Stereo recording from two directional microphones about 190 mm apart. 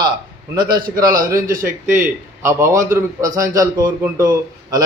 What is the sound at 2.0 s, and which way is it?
A man's voice, 15° right (ahead or behind).